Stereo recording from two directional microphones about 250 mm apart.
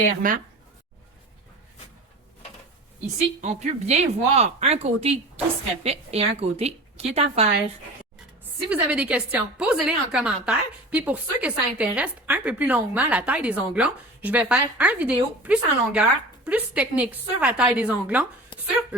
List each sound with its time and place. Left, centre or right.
0.2 s speech: right
3.4 s speech: right
8.7 s a woman's voice: centre
18.5 s a sound: centre